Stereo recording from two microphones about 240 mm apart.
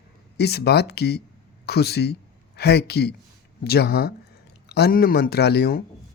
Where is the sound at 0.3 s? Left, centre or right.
Left.